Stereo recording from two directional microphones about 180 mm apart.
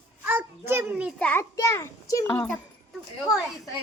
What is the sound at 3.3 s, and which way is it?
Speech, centre (ahead or behind).